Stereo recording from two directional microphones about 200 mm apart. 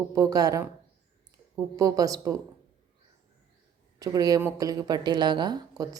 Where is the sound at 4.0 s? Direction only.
20° right (ahead or behind).